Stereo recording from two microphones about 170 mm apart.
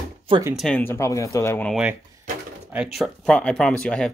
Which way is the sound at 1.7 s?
5° right (ahead or behind).